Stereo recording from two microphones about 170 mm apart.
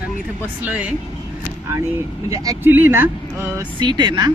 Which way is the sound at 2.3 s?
20° right (ahead or behind).